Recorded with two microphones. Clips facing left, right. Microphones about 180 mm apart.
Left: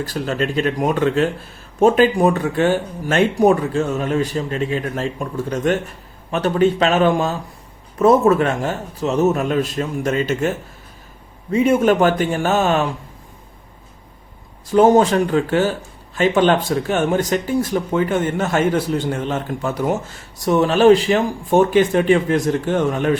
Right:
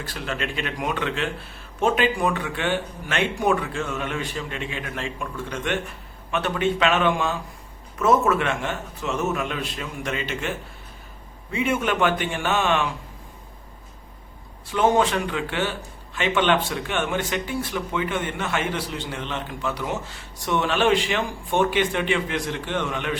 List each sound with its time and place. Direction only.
0.0 s speech: 40° left (ahead or behind)
11.5 s speech: 40° left (ahead or behind)
14.7 s speech: 40° left (ahead or behind)